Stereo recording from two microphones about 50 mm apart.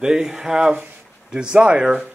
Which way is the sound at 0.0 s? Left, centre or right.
Centre.